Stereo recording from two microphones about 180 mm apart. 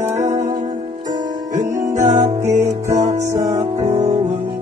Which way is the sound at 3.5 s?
35° right (ahead or behind).